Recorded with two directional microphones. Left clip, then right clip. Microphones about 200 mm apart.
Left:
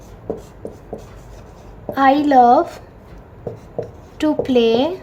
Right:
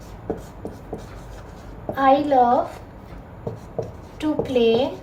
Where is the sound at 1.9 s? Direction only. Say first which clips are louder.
Left 4 dB; 55° left (ahead or behind).